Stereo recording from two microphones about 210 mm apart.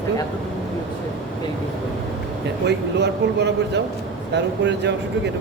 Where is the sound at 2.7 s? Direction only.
55° right (ahead or behind).